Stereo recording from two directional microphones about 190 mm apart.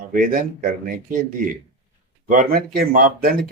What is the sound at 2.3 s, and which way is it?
Speech, 45° right (ahead or behind).